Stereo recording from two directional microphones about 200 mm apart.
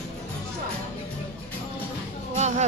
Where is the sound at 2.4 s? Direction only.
35° right (ahead or behind).